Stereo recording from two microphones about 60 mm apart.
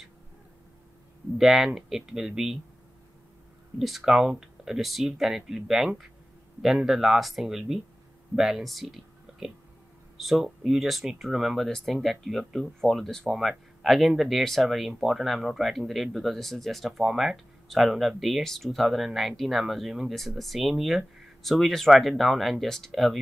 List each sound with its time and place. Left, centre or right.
1.4 s speech: centre
3.7 s speech: centre